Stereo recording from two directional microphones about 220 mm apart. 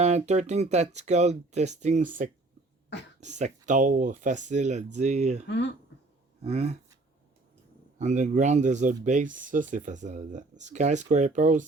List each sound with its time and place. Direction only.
0.0 s speech: 30° right (ahead or behind)
7.9 s speech: 35° right (ahead or behind)